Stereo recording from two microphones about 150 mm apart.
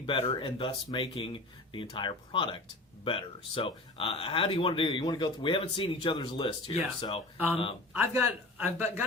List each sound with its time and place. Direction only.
0.0 s speech: 35° left (ahead or behind)
8.6 s speech: 15° right (ahead or behind)